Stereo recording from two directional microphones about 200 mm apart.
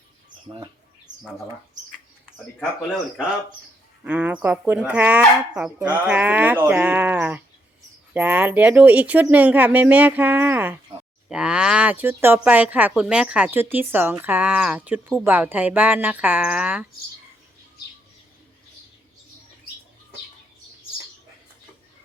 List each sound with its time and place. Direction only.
0.4 s speech: 20° right (ahead or behind)
2.6 s speech: centre (ahead or behind)